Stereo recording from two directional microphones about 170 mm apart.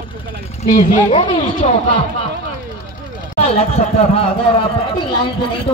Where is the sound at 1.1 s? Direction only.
30° left (ahead or behind).